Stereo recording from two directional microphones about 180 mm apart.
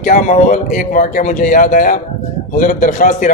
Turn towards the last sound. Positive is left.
turn(degrees=45)  # may be behind; listen again after turning